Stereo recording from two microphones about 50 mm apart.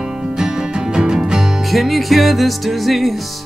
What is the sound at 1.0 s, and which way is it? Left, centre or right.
Music, centre.